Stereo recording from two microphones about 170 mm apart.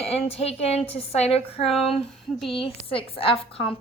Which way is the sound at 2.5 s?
30° left (ahead or behind).